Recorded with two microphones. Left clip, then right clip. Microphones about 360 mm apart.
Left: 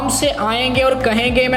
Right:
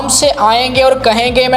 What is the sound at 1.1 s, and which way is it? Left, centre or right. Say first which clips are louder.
Speech: right 4 dB; right.